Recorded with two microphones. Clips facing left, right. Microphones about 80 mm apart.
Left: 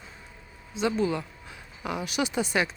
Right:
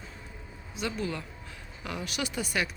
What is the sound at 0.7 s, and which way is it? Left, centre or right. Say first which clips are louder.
Speech: left 7 dB; left.